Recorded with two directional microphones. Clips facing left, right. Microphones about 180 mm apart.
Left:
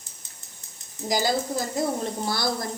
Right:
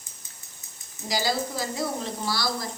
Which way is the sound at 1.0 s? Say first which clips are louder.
Left 3 dB; 50° left (ahead or behind).